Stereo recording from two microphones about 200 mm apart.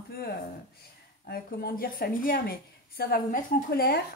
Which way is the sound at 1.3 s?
50° left (ahead or behind).